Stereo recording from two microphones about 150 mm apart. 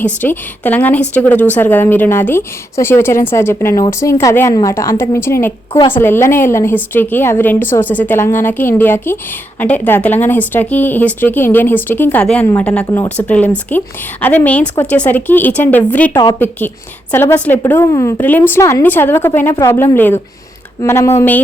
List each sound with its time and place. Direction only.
0.2 s a woman's voice: 10° left (ahead or behind)
12.8 s speech: 20° left (ahead or behind)
13.1 s a woman's voice: 10° left (ahead or behind)